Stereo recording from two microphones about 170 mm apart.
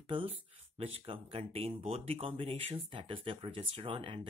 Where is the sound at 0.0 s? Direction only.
30° right (ahead or behind).